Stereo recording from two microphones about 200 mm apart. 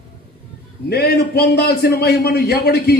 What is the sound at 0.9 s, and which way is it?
A man's voice, 50° left (ahead or behind).